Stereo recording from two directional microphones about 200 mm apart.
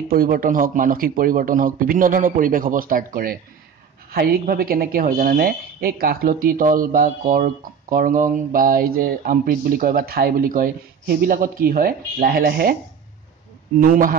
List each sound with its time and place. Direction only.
0.1 s speech: 45° right (ahead or behind)
13.7 s speech: 45° right (ahead or behind)